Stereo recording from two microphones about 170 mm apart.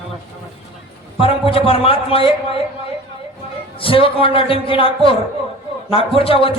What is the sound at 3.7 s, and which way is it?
A man's voice, 30° left (ahead or behind).